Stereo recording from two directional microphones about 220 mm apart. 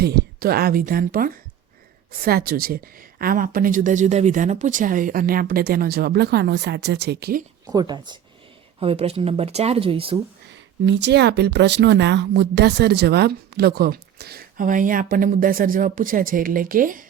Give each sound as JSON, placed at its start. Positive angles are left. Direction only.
{"t": 0.0, "sound": "a woman's voice", "side_deg": -45}
{"t": 7.7, "sound": "speech", "side_deg": -20}
{"t": 10.5, "sound": "speech", "side_deg": -55}